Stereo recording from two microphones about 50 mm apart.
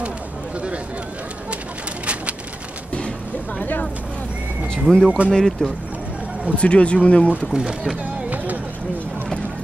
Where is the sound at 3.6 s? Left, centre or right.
Left.